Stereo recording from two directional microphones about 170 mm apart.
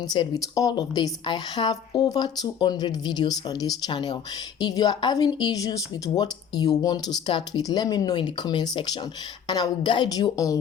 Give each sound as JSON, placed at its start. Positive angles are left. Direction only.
{"t": 0.1, "sound": "speech", "side_deg": 25}